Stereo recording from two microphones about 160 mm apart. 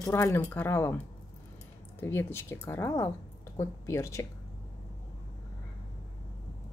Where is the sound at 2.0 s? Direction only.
15° left (ahead or behind).